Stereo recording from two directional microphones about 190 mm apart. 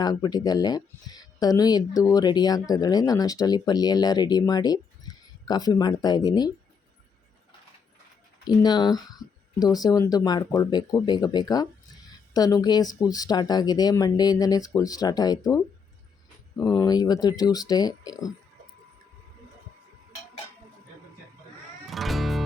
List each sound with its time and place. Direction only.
0.0 s speech: 20° left (ahead or behind)
5.1 s a sound: 20° left (ahead or behind)
5.5 s speech: 20° left (ahead or behind)
8.4 s speech: 20° left (ahead or behind)
16.6 s speech: 20° left (ahead or behind)
21.8 s music: centre (ahead or behind)